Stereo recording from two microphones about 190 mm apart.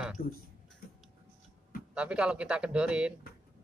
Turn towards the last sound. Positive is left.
turn(degrees=-5)  # may be behind; listen again after turning